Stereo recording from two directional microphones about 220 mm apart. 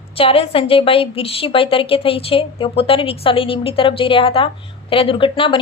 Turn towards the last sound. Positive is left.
turn(degrees=25)  # may be behind; listen again after turning